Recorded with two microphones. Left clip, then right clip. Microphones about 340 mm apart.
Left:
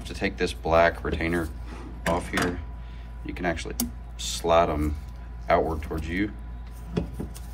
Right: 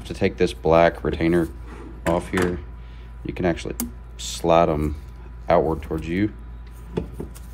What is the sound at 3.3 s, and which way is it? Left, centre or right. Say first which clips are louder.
Speech: right 4 dB; centre.